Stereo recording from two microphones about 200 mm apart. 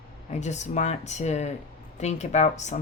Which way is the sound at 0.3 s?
35° left (ahead or behind).